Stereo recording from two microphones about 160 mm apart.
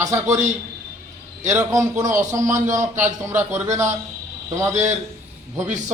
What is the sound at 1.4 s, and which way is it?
A man's voice, 15° right (ahead or behind).